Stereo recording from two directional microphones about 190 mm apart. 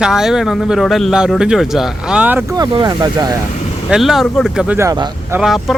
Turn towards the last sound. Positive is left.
turn(degrees=0)  # may be behind; listen again after turning